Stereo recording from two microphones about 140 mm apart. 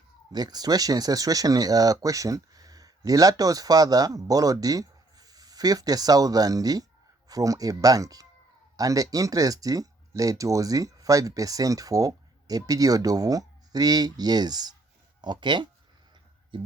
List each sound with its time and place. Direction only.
0.3 s speech: 30° right (ahead or behind)